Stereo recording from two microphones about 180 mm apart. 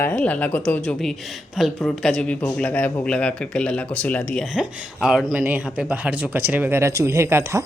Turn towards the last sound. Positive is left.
turn(degrees=-15)  # may be behind; listen again after turning